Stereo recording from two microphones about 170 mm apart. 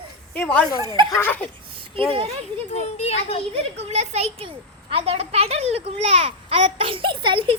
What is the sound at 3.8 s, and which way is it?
A child's voice, 40° right (ahead or behind).